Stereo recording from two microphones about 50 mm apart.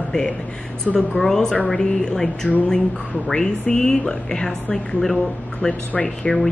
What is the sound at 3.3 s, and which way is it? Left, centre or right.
Speech, centre.